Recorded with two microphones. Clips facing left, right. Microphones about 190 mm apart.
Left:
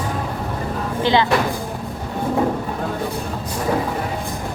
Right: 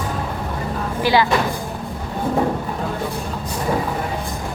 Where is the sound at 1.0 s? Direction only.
20° left (ahead or behind).